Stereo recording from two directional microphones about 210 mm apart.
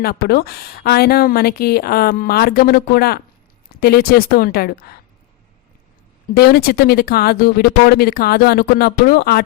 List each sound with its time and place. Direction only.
0.0 s speech: 45° left (ahead or behind)
6.3 s speech: 45° left (ahead or behind)